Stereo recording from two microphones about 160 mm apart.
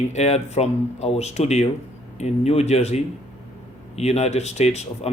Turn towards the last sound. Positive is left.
turn(degrees=40)  # may be behind; listen again after turning